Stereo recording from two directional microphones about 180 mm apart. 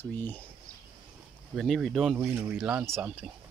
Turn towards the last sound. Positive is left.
turn(degrees=-10)  # may be behind; listen again after turning